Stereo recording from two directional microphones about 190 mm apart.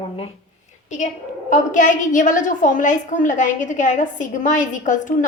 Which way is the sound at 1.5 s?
40° left (ahead or behind).